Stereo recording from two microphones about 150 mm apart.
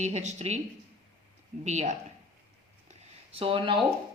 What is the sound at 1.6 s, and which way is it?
Speech, 50° right (ahead or behind).